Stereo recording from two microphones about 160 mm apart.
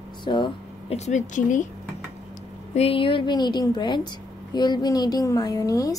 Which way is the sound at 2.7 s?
35° left (ahead or behind).